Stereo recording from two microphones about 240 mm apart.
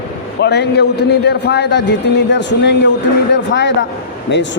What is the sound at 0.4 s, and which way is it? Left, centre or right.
Speech, left.